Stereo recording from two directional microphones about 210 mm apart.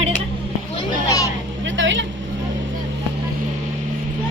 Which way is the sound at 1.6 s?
60° right (ahead or behind).